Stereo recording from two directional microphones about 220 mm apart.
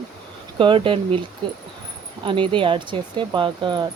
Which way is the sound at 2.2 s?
20° right (ahead or behind).